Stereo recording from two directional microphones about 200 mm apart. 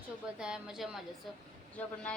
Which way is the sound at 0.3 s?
5° right (ahead or behind).